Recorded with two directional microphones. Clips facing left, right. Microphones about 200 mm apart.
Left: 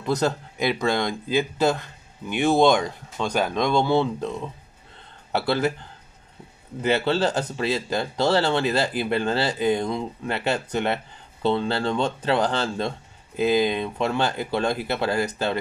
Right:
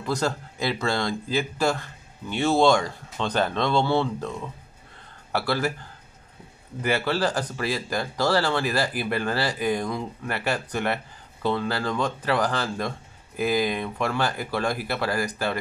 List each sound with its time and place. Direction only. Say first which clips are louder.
0.0 s speech: left 3 dB; 20° left (ahead or behind)